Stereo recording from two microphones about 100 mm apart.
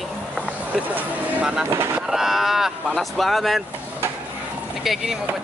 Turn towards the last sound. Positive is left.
turn(degrees=0)  # may be behind; listen again after turning